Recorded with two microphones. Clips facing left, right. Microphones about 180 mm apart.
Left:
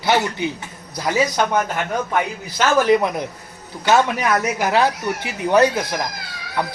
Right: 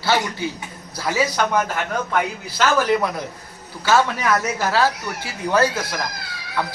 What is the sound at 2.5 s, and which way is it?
Speech, 20° left (ahead or behind).